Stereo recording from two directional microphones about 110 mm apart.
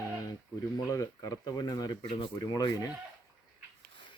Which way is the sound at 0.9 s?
30° left (ahead or behind).